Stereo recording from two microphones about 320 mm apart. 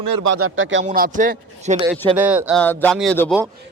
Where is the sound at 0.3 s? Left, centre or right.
Right.